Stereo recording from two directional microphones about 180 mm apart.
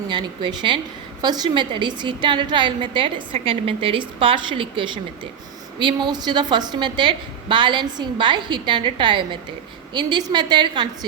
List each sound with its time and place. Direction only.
0.1 s a woman's voice: 25° right (ahead or behind)